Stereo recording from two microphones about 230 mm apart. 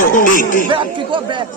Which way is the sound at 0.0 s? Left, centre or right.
Left.